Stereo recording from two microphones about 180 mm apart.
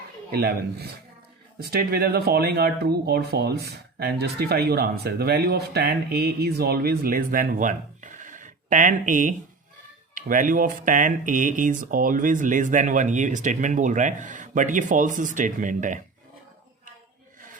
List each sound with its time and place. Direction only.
0.3 s speech: 60° right (ahead or behind)